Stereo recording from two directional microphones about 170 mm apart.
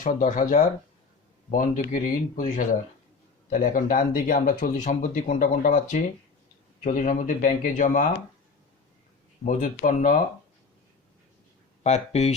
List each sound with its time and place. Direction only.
0.0 s speech: 50° left (ahead or behind)
9.5 s speech: 50° left (ahead or behind)
11.8 s speech: 40° left (ahead or behind)